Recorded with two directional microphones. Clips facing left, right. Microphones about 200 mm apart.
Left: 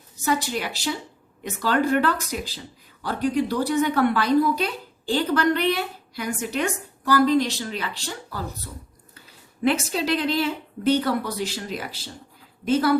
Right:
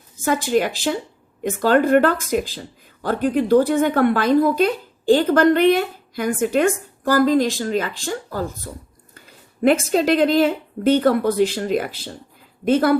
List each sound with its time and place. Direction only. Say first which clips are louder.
0.2 s a woman's voice: right 6 dB; 50° right (ahead or behind)